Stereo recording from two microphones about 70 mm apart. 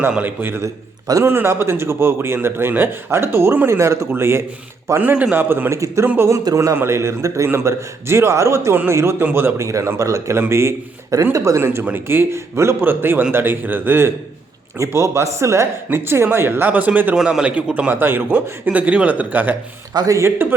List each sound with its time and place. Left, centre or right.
0.1 s a man's voice: right
5.1 s a man's voice: centre
5.4 s speech: right
5.8 s a man's voice: right
9.2 s speech: right
9.6 s a man's voice: right
11.6 s speech: right
14.8 s speech: right
17.2 s a man's voice: centre; by 19.5 s right
19.9 s speech: right
20.1 s speech: right